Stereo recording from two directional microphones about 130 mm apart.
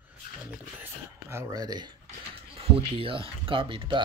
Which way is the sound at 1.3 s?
30° right (ahead or behind).